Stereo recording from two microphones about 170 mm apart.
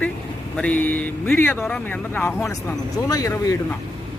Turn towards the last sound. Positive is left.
turn(degrees=20)  # may be behind; listen again after turning